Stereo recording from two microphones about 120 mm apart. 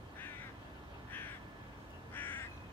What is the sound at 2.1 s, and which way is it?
Crow, 15° left (ahead or behind).